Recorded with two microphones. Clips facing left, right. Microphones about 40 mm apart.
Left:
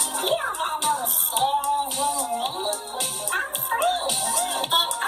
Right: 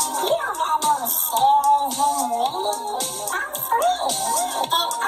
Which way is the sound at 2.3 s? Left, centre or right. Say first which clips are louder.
Right 5 dB; left.